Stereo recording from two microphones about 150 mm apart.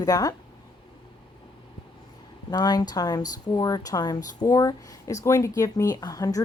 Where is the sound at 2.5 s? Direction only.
25° left (ahead or behind).